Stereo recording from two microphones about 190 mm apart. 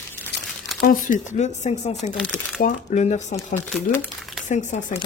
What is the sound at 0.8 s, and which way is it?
Speech, 45° left (ahead or behind).